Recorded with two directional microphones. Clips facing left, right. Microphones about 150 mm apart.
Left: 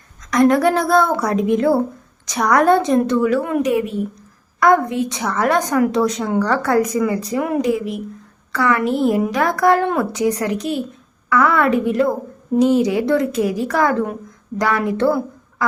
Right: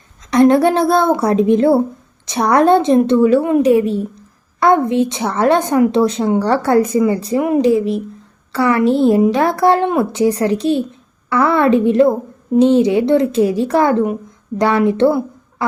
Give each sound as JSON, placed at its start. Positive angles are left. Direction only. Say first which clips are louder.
{"t": 0.3, "sound": "a woman's voice", "louder": "right 3 dB", "side_deg": -30}